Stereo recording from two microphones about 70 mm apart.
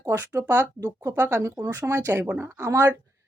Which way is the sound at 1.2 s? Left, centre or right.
Right.